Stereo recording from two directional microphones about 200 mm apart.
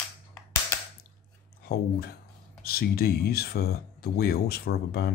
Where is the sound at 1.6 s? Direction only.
50° left (ahead or behind).